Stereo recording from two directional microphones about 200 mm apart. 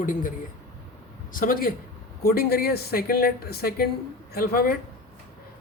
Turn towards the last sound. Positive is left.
turn(degrees=50)  # may be behind; listen again after turning